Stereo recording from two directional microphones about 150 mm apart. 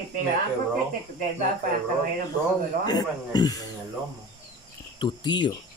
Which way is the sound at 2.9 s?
25° left (ahead or behind).